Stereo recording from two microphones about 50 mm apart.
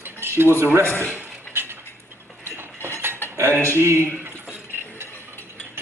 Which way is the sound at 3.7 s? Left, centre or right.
Right.